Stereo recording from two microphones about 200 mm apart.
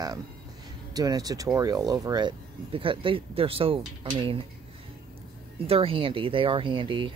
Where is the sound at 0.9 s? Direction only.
20° right (ahead or behind).